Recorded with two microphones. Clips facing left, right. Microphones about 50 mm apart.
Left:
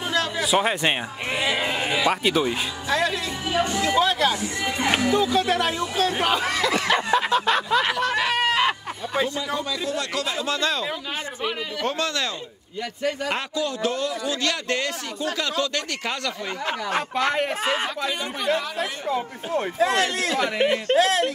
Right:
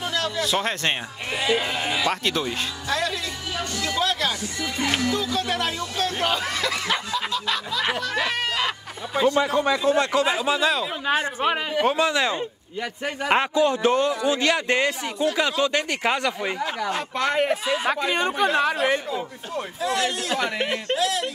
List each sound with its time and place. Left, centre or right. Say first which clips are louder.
0.1 s speech: left 4 dB; centre
7.1 s a sound: left 6 dB; left
8.2 s a sound: left 5 dB; centre
9.3 s a man's voice: right 7 dB; right; by 10.9 s centre
11.1 s speech: right 7 dB; right
11.8 s speech: right 5 dB; centre
13.0 s a man's voice: right 4 dB; right
17.1 s speech: right 3 dB; centre
18.1 s speech: right 4 dB; right
19.0 s speech: left 4 dB; left
20.3 s speech: left 3 dB; centre
20.9 s speech: left 5 dB; left